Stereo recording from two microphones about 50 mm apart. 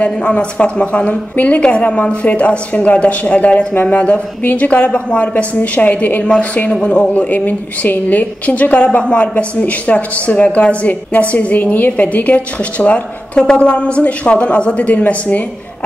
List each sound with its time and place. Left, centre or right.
0.0 s a woman's voice: left
7.0 s a woman's voice: left